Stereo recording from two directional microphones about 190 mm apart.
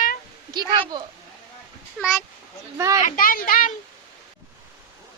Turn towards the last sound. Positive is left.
turn(degrees=45)  # may be behind; listen again after turning